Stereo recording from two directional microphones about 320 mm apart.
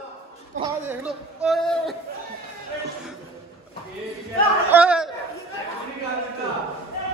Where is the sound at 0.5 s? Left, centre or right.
Right.